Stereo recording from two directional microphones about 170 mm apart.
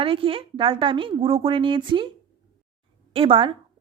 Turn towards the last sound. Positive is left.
turn(degrees=-30)  # may be behind; listen again after turning